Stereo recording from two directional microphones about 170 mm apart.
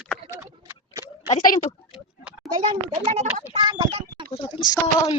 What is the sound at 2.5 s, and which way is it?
Speech, 25° right (ahead or behind).